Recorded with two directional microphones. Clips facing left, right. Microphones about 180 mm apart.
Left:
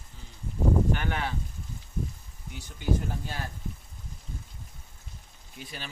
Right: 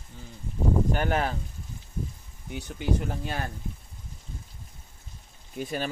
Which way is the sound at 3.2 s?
65° right (ahead or behind).